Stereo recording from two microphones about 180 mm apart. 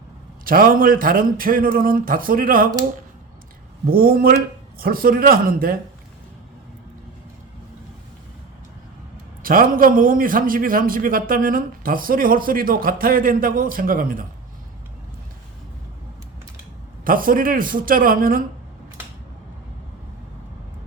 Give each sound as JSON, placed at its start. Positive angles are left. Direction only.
{"t": 0.4, "sound": "a man's voice", "side_deg": -55}
{"t": 3.8, "sound": "a man's voice", "side_deg": -55}
{"t": 9.4, "sound": "a man's voice", "side_deg": -50}
{"t": 17.0, "sound": "a man's voice", "side_deg": -50}